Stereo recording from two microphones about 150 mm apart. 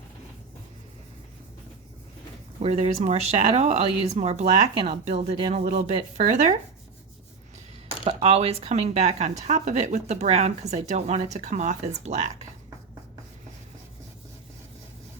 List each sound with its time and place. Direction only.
2.6 s speech: 45° right (ahead or behind)
8.0 s speech: 40° right (ahead or behind)